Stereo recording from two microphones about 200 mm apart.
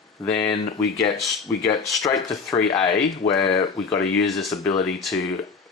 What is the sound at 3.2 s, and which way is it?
Speech, 35° left (ahead or behind).